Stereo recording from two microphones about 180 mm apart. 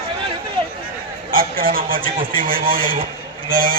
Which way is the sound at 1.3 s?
50° right (ahead or behind).